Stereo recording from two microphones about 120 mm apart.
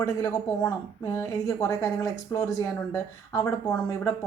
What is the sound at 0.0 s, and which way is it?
Speech, 30° left (ahead or behind).